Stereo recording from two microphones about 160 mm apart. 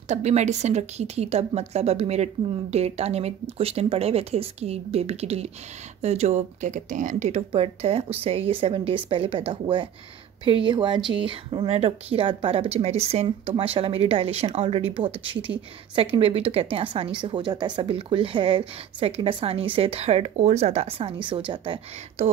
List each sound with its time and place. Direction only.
0.1 s speech: 45° right (ahead or behind)